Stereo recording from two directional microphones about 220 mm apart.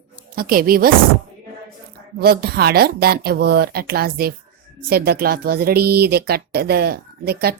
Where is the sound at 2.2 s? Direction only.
45° right (ahead or behind).